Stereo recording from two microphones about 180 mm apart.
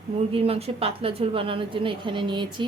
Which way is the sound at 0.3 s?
35° right (ahead or behind).